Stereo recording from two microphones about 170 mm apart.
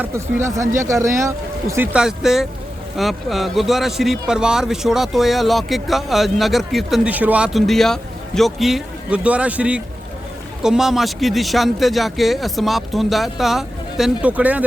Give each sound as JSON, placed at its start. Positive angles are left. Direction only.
{"t": 0.0, "sound": "a man's voice", "side_deg": -15}